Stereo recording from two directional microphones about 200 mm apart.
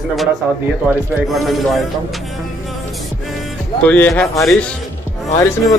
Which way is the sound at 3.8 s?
5° left (ahead or behind).